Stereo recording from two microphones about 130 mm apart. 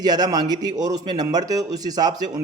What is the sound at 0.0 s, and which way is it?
A man's voice, 30° right (ahead or behind).